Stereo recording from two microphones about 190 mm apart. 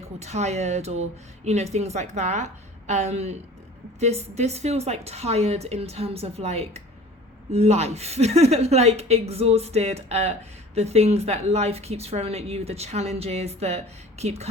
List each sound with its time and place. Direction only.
0.2 s a woman's voice: 35° right (ahead or behind)